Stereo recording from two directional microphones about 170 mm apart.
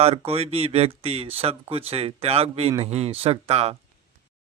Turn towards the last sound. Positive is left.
turn(degrees=-35)  # may be behind; listen again after turning